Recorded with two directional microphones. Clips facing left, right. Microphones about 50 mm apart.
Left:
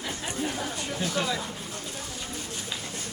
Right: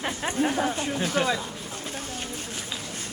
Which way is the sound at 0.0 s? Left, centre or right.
Right.